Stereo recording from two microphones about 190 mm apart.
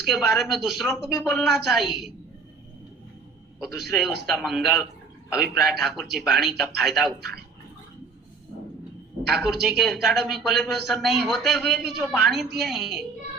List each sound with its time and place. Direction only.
0.1 s a man's voice: centre (ahead or behind)
3.7 s a man's voice: 60° right (ahead or behind)
3.9 s a man's voice: centre (ahead or behind)
9.3 s a man's voice: centre (ahead or behind)